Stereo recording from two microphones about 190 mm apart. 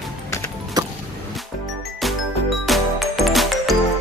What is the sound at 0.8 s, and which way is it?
Music, 20° right (ahead or behind).